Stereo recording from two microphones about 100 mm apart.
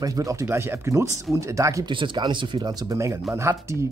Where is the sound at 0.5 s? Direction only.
25° right (ahead or behind).